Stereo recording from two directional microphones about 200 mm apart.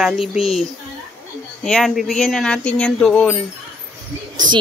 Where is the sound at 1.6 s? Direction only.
Centre (ahead or behind).